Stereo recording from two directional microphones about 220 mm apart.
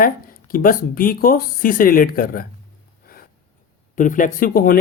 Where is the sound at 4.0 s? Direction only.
35° left (ahead or behind).